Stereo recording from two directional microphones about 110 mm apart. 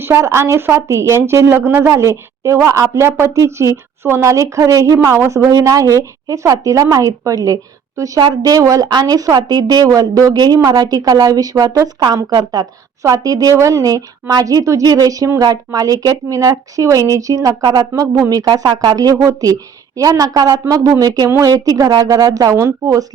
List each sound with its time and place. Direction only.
0.0 s a woman's voice: 25° right (ahead or behind)